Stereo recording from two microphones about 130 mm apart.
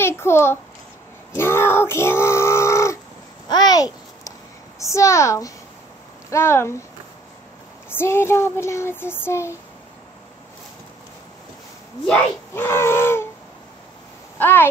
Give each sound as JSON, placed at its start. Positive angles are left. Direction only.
{"t": 0.0, "sound": "a child's voice", "side_deg": 20}
{"t": 3.4, "sound": "babbling", "side_deg": 30}
{"t": 4.7, "sound": "child singing", "side_deg": 25}
{"t": 8.0, "sound": "child singing", "side_deg": 20}
{"t": 12.5, "sound": "child singing", "side_deg": 20}
{"t": 14.4, "sound": "speech", "side_deg": 15}